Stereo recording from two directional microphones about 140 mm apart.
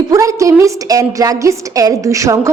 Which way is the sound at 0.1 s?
25° right (ahead or behind).